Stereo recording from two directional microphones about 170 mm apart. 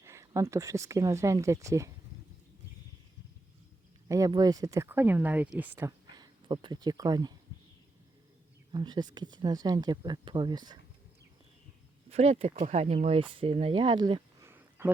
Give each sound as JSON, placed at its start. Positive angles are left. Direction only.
{"t": 0.0, "sound": "speech", "side_deg": -15}
{"t": 4.1, "sound": "speech", "side_deg": -20}
{"t": 6.1, "sound": "speech", "side_deg": -25}
{"t": 8.7, "sound": "speech", "side_deg": -25}
{"t": 12.0, "sound": "a man's voice", "side_deg": -40}